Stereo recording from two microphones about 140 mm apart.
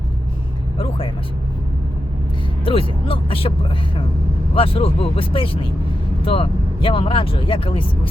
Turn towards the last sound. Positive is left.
turn(degrees=40)  # may be behind; listen again after turning